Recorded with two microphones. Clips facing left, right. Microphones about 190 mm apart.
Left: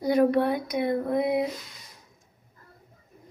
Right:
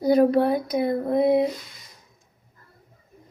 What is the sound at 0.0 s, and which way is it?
Speech, 30° right (ahead or behind).